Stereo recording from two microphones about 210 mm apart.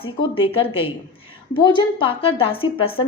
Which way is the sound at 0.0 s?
25° left (ahead or behind).